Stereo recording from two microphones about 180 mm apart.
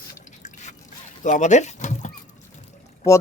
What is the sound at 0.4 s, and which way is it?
Drip, 40° left (ahead or behind).